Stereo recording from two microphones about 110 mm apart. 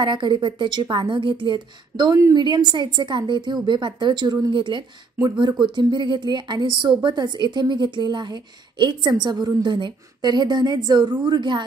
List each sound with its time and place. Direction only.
0.0 s speech: 45° right (ahead or behind)